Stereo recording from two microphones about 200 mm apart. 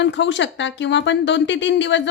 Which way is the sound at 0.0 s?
65° left (ahead or behind).